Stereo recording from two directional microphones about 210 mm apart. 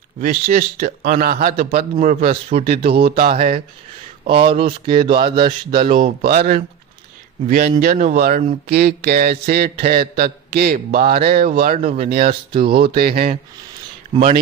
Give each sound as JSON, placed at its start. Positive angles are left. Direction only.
{"t": 0.2, "sound": "a man's voice", "side_deg": -40}
{"t": 2.9, "sound": "mantra", "side_deg": -45}
{"t": 4.3, "sound": "speech", "side_deg": -25}
{"t": 6.2, "sound": "mantra", "side_deg": -45}
{"t": 11.8, "sound": "speech", "side_deg": -30}
{"t": 13.0, "sound": "mantra", "side_deg": -45}
{"t": 14.2, "sound": "speech", "side_deg": -30}